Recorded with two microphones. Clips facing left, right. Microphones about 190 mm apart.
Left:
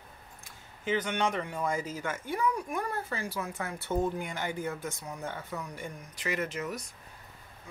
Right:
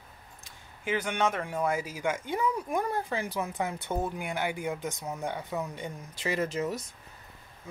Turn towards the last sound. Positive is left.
turn(degrees=-30)  # may be behind; listen again after turning